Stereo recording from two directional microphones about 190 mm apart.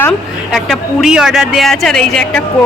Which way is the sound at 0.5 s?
Centre (ahead or behind).